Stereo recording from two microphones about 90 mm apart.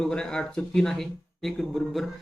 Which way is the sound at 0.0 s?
10° left (ahead or behind).